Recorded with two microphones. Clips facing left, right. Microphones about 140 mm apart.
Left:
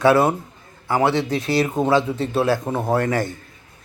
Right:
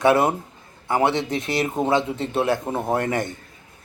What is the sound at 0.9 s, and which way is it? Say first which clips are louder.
A man's voice: left 2 dB; 25° right (ahead or behind).